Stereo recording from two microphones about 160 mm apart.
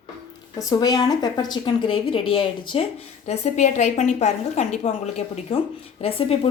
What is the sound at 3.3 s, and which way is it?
A woman's voice, 45° left (ahead or behind).